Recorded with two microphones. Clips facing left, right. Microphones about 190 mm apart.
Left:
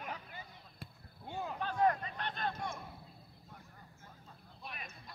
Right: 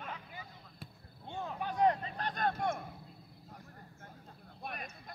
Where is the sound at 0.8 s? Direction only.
5° left (ahead or behind).